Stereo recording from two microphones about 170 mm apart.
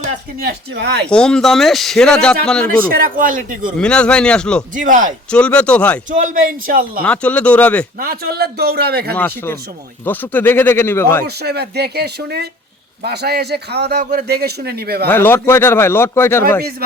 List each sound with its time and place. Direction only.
0.0 s a sound: 45° right (ahead or behind)
0.4 s speech: 80° right
1.1 s speech: 5° left (ahead or behind)
3.0 s a man's voice: 55° right (ahead or behind)
3.8 s speech: 5° left (ahead or behind)
4.7 s a man's voice: 50° right (ahead or behind)
5.3 s a man's voice: 5° left (ahead or behind)
6.1 s a man's voice: 50° right (ahead or behind)
7.0 s a man's voice: 10° left (ahead or behind)
7.9 s a man's voice: 60° right (ahead or behind)
9.1 s a man's voice: 15° left (ahead or behind)
11.4 s a man's voice: 70° right (ahead or behind)
15.0 s a man's voice: 10° left (ahead or behind)